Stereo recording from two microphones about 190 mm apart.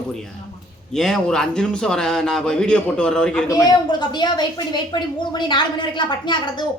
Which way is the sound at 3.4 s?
20° left (ahead or behind).